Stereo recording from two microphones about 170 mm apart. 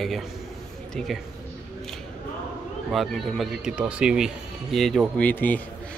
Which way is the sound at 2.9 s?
Centre (ahead or behind).